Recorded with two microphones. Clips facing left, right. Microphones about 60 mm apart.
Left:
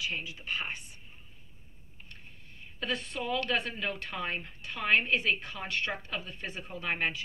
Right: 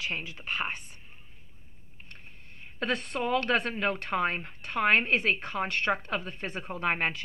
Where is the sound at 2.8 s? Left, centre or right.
Right.